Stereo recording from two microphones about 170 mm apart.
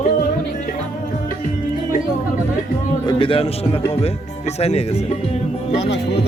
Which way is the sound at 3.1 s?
30° left (ahead or behind).